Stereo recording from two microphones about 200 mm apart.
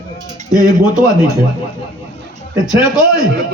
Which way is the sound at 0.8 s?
20° left (ahead or behind).